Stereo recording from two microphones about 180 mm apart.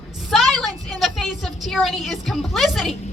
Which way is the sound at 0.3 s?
Centre (ahead or behind).